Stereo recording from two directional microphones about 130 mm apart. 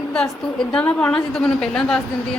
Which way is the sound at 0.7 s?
10° left (ahead or behind).